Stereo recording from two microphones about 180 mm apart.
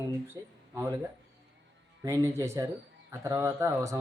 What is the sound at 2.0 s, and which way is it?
Speech, 15° right (ahead or behind).